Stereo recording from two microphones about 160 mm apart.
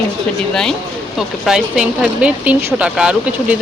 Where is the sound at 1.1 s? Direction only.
5° right (ahead or behind).